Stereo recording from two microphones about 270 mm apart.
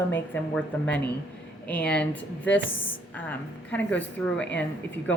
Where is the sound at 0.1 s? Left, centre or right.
Centre.